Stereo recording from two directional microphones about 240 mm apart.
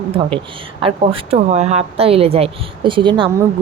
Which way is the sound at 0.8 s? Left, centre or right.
Right.